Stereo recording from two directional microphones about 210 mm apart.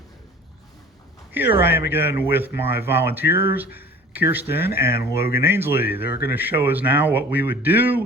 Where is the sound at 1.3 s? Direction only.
10° right (ahead or behind).